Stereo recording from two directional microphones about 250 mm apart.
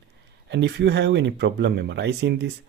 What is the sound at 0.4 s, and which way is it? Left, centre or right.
Speech, right.